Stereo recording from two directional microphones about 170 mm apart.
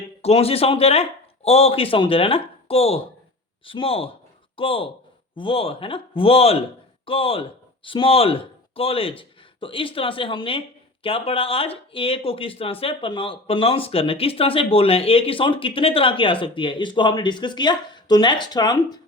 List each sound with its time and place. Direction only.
0.2 s speech: 35° left (ahead or behind)